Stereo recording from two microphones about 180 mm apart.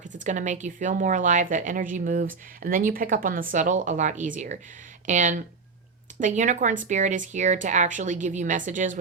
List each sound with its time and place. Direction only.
0.1 s speech: 45° right (ahead or behind)